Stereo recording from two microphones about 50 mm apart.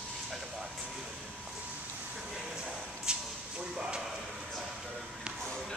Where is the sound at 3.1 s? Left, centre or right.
Centre.